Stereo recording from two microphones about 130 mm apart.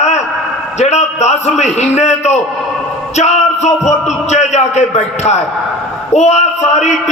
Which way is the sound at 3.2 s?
60° left (ahead or behind).